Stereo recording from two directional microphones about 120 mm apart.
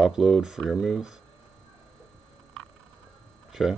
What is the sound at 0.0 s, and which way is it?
Speech, 5° right (ahead or behind).